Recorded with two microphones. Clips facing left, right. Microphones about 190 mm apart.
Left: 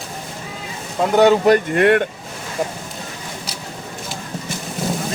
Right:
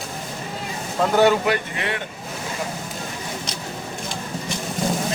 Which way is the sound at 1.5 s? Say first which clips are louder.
Left 10 dB; 55° left (ahead or behind).